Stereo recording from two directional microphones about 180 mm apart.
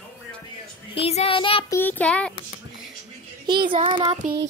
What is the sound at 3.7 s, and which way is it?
Child singing, 30° right (ahead or behind).